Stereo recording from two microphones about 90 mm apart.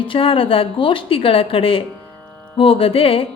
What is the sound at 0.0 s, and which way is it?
Speech, 80° left.